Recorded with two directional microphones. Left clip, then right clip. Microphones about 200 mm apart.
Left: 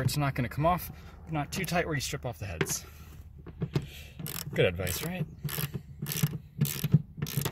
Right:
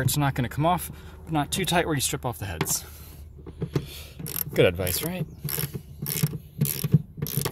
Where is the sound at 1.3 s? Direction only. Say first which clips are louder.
Right 7 dB; 15° right (ahead or behind).